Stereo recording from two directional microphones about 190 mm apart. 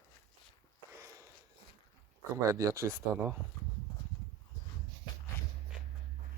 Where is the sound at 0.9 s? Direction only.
15° right (ahead or behind).